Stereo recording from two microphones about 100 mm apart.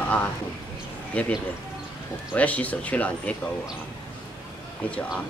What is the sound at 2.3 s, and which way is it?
Speech, 15° left (ahead or behind).